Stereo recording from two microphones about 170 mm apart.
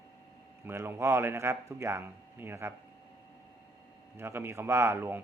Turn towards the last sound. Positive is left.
turn(degrees=-10)  # may be behind; listen again after turning